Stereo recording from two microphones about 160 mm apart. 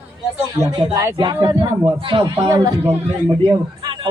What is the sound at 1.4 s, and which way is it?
A man's voice, 30° right (ahead or behind).